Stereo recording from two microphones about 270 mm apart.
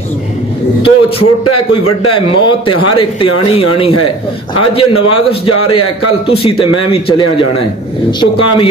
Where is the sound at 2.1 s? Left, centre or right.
Centre.